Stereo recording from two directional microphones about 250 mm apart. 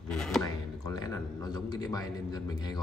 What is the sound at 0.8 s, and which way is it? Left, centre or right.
A man's voice, centre.